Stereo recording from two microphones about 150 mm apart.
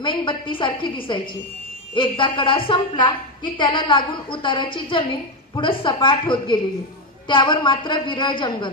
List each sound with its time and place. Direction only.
0.0 s a woman's voice: 30° left (ahead or behind)